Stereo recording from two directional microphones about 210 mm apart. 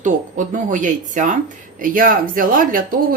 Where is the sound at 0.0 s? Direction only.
40° right (ahead or behind).